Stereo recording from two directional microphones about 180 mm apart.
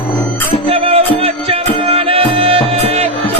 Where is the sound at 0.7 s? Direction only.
35° right (ahead or behind).